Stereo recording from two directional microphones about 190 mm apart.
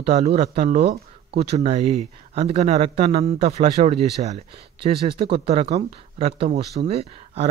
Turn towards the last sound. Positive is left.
turn(degrees=-30)  # may be behind; listen again after turning